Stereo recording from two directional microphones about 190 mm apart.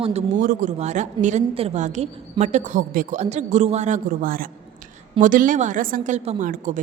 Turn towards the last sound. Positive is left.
turn(degrees=-45)  # may be behind; listen again after turning